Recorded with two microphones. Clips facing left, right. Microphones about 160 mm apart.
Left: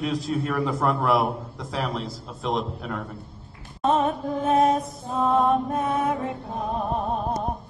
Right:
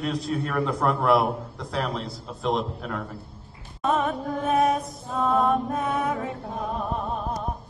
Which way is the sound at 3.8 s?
30° left (ahead or behind).